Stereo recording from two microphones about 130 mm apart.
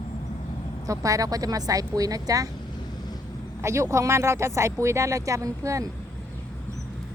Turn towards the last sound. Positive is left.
turn(degrees=-25)  # may be behind; listen again after turning